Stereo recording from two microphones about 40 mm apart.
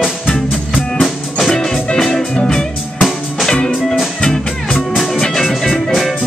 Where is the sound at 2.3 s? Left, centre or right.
Centre.